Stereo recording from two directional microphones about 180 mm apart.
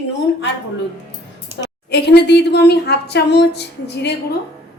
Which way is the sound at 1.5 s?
15° right (ahead or behind).